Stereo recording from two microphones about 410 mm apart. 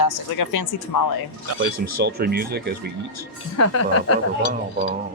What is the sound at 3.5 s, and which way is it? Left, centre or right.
Speech, left.